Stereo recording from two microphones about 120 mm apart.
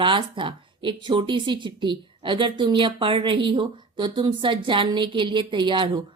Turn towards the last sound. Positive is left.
turn(degrees=-40)  # may be behind; listen again after turning